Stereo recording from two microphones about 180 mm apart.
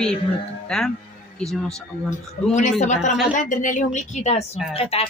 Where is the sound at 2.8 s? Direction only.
40° left (ahead or behind).